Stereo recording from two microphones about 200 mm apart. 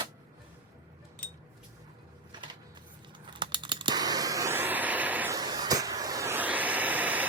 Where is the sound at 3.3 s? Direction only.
25° right (ahead or behind).